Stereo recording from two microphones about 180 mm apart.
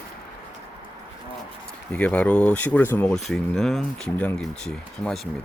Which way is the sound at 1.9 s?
5° left (ahead or behind).